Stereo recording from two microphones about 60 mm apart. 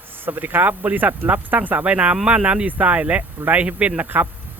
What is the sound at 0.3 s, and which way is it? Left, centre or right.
Speech, right.